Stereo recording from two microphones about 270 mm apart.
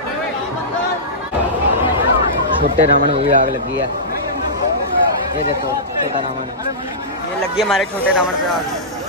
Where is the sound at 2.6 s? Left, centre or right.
Right.